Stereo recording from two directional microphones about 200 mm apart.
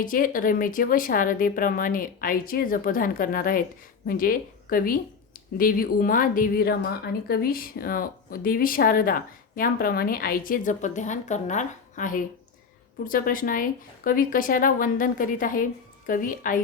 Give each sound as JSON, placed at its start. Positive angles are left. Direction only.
{"t": 0.0, "sound": "a woman's voice", "side_deg": 45}